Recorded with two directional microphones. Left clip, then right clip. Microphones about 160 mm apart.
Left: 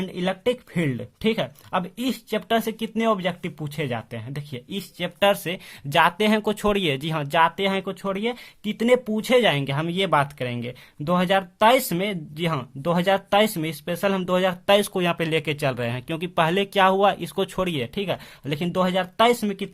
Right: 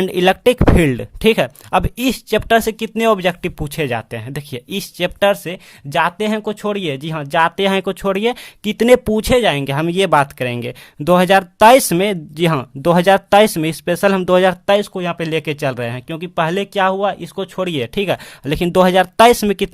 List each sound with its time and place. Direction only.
0.0 s speech: 40° right (ahead or behind)
5.3 s speech: 20° right (ahead or behind)
14.8 s speech: 15° right (ahead or behind)
17.7 s speech: 30° right (ahead or behind)